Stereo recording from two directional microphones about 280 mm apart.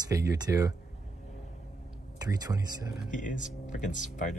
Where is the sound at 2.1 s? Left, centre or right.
Centre.